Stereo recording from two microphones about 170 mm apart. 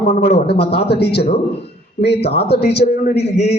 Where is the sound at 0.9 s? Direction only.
70° left (ahead or behind).